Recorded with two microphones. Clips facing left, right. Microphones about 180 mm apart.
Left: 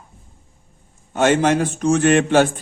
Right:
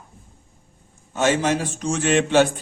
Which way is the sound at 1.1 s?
60° left (ahead or behind).